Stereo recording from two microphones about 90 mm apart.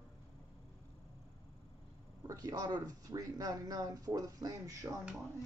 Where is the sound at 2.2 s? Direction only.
40° right (ahead or behind).